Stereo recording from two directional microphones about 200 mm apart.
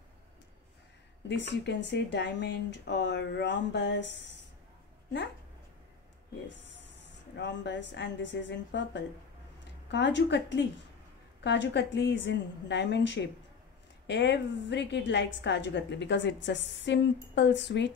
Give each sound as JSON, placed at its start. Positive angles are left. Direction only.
{"t": 1.3, "sound": "a woman's voice", "side_deg": 60}
{"t": 6.6, "sound": "a woman's voice", "side_deg": 60}